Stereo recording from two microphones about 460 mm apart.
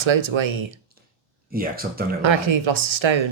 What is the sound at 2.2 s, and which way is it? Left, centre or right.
Speech, right.